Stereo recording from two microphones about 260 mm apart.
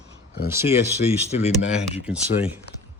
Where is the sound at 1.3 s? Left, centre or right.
Left.